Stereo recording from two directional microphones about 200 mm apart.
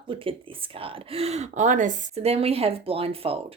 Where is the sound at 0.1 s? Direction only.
25° right (ahead or behind).